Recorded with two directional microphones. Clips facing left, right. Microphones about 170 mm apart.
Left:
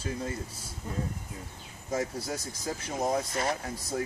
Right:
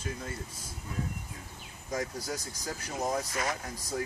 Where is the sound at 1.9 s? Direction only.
30° left (ahead or behind).